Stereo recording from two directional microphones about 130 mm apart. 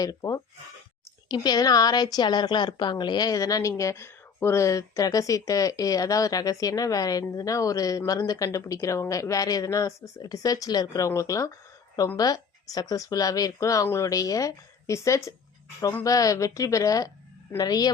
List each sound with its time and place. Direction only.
0.0 s a woman's voice: 25° left (ahead or behind)